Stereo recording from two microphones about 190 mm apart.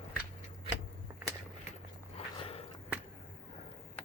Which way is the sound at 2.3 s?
30° left (ahead or behind).